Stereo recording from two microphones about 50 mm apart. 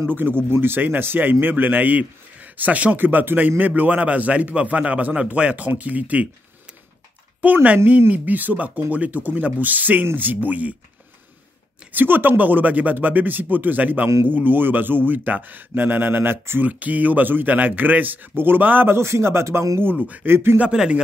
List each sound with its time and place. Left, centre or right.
0.1 s a man's voice: right
7.4 s a man's voice: right
11.9 s a man's voice: right
16.6 s a man's voice: right
18.9 s speech: right
19.8 s a man's voice: right
20.2 s speech: right
20.7 s speech: centre